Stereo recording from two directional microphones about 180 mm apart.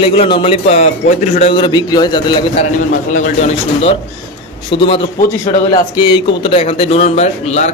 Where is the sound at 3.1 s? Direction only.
40° left (ahead or behind).